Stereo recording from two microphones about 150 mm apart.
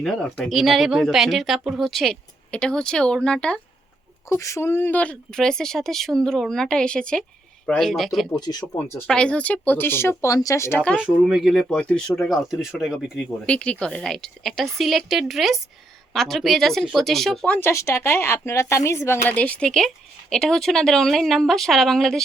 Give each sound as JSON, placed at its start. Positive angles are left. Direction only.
{"t": 0.0, "sound": "speech", "side_deg": 5}
{"t": 4.3, "sound": "speech", "side_deg": 20}
{"t": 8.7, "sound": "speech", "side_deg": 15}
{"t": 10.9, "sound": "speech", "side_deg": -5}